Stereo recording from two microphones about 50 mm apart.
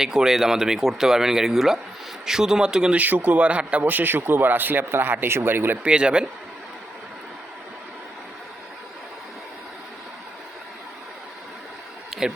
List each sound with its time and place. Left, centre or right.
0.0 s speech: centre
2.9 s a man's voice: right
5.8 s speech: centre
12.1 s a sound: centre